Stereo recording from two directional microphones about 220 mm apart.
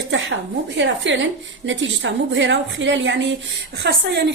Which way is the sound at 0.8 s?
55° right (ahead or behind).